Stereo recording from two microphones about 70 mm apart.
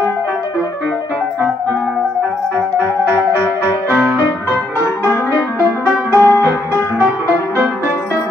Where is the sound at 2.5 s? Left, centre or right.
Right.